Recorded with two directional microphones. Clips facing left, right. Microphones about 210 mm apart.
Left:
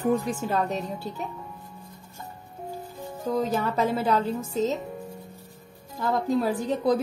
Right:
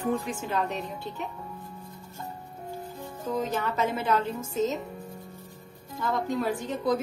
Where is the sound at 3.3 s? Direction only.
35° left (ahead or behind).